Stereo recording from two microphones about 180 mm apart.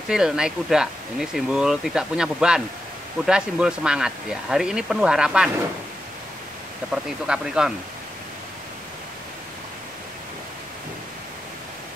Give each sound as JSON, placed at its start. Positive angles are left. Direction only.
{"t": 0.1, "sound": "speech", "side_deg": -5}
{"t": 6.9, "sound": "speech", "side_deg": -5}